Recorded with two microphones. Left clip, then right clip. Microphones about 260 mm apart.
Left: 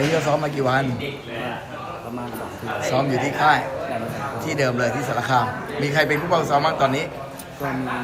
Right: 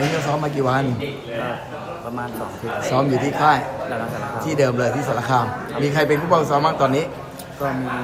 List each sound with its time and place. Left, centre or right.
0.3 s a man's voice: centre
2.8 s a man's voice: centre